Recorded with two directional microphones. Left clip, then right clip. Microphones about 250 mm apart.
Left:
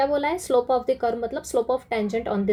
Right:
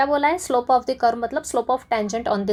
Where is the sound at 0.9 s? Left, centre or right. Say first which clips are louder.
Right 5 dB; right.